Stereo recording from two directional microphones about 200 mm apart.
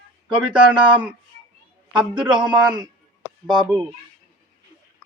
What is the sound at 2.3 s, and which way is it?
Speech, 20° right (ahead or behind).